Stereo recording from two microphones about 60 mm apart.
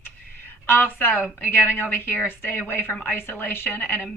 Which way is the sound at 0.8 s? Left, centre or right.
Left.